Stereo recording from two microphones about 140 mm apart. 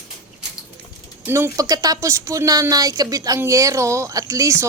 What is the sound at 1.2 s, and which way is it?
Speech, 20° right (ahead or behind).